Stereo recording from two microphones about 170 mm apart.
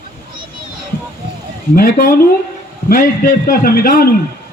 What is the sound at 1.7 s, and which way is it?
A woman's voice, 50° left (ahead or behind).